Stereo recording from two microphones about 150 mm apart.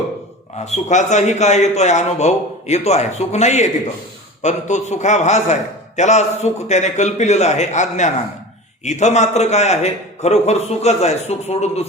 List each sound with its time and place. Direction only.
0.6 s a man's voice: 50° left (ahead or behind)